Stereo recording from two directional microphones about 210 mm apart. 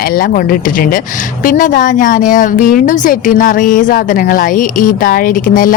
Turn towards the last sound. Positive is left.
turn(degrees=40)  # may be behind; listen again after turning